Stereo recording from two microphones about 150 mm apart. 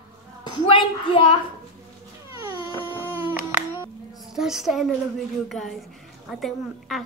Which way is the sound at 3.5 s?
15° right (ahead or behind).